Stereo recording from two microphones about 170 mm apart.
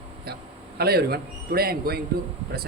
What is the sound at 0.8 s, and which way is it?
A man's voice, 70° right (ahead or behind).